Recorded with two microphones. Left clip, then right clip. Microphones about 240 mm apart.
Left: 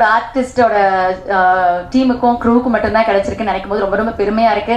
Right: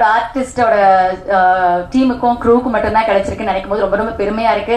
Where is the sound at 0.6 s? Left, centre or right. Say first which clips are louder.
Right 2 dB; left.